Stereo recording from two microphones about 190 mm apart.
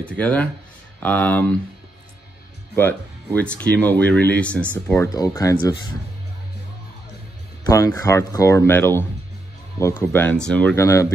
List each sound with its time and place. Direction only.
0.0 s speech: 5° left (ahead or behind)
2.7 s speech: 10° left (ahead or behind)
7.6 s speech: 15° left (ahead or behind)